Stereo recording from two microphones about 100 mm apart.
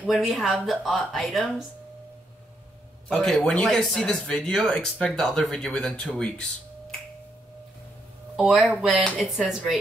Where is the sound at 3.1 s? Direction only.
5° left (ahead or behind).